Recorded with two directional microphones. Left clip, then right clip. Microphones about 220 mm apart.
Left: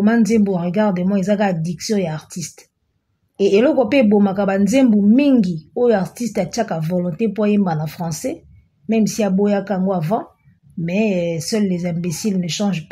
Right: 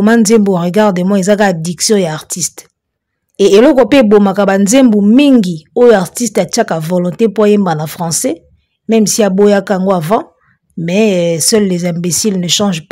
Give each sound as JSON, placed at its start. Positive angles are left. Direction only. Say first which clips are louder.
{"t": 0.0, "sound": "a woman's voice", "louder": "right 8 dB", "side_deg": -40}